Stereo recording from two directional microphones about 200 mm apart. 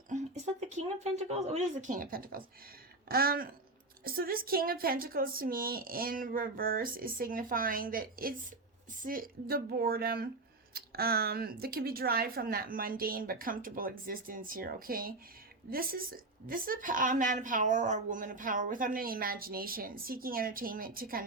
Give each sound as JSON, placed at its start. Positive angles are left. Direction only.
{"t": 1.0, "sound": "a woman's voice", "side_deg": -30}